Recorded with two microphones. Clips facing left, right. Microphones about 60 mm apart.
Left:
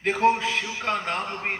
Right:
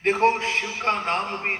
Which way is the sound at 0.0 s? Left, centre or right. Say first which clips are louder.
Right 1 dB; right.